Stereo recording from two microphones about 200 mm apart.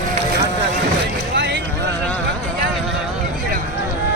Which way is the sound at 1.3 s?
60° right (ahead or behind).